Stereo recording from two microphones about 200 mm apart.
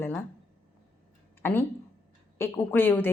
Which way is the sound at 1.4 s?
10° left (ahead or behind).